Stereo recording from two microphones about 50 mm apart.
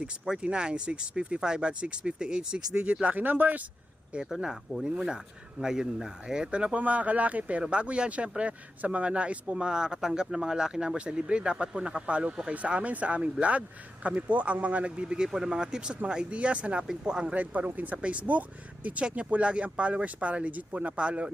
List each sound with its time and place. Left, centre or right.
0.3 s speech: centre; by 3.6 s right
4.4 s speech: centre
16.8 s speech: centre
17.3 s speech: right